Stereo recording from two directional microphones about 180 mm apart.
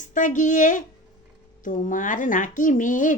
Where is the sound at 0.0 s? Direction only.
45° left (ahead or behind).